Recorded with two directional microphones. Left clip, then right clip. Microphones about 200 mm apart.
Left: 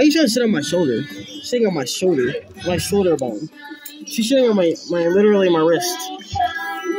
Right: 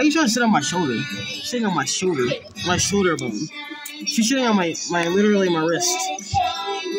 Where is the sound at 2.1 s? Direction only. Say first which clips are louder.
Left 3 dB; 35° right (ahead or behind).